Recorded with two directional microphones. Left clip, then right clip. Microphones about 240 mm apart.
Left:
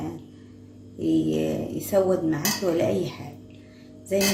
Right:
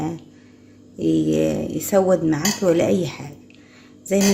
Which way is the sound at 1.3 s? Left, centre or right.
Right.